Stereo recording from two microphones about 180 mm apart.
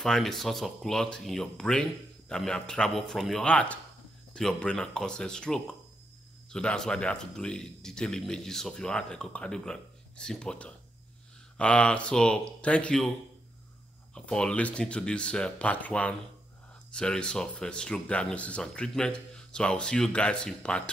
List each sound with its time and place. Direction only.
0.0 s a man's voice: centre (ahead or behind)
14.1 s a man's voice: 5° left (ahead or behind)